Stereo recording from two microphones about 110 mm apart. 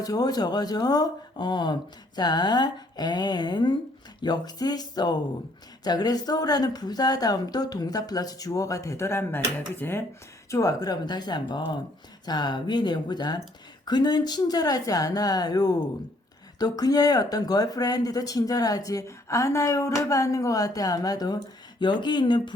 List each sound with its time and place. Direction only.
0.0 s speech: 35° left (ahead or behind)
10.5 s speech: 30° left (ahead or behind)